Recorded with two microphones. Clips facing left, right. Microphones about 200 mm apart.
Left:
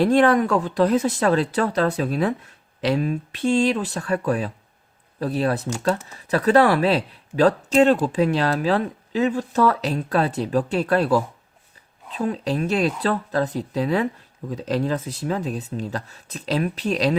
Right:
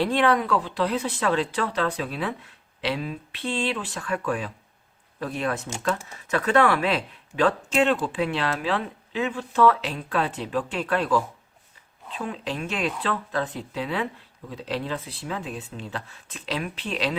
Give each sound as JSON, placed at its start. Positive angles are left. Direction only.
{"t": 0.0, "sound": "speech", "side_deg": 45}